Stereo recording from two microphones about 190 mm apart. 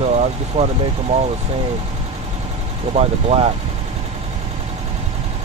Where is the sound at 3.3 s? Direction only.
35° right (ahead or behind).